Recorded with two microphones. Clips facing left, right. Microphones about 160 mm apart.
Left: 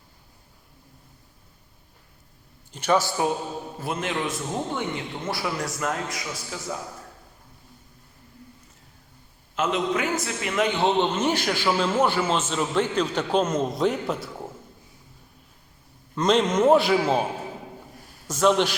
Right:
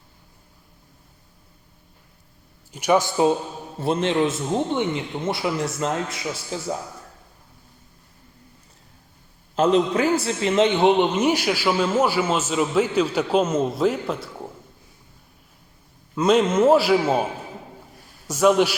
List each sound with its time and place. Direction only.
2.7 s a man's voice: 15° right (ahead or behind); by 6.7 s 30° right (ahead or behind)
9.6 s a man's voice: 35° right (ahead or behind); by 14.3 s centre (ahead or behind)
16.1 s a man's voice: 5° right (ahead or behind)
18.3 s a man's voice: 10° right (ahead or behind)